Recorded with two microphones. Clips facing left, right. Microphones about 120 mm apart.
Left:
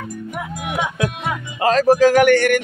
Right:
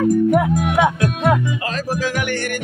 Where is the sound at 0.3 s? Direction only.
65° right (ahead or behind).